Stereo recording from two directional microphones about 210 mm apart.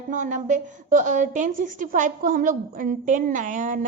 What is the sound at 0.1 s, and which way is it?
A woman's voice, 35° right (ahead or behind).